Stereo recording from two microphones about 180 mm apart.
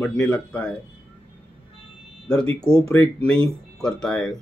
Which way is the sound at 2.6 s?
5° left (ahead or behind).